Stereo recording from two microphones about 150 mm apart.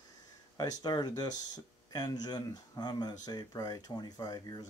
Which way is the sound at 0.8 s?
25° left (ahead or behind).